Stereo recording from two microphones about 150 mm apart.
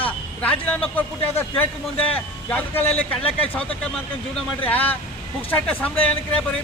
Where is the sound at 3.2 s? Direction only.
40° left (ahead or behind).